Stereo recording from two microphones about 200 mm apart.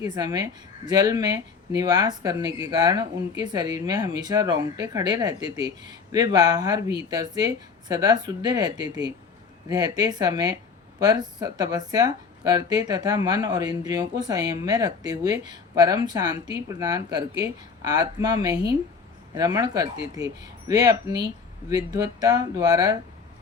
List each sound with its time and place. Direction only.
0.0 s speech: 20° right (ahead or behind)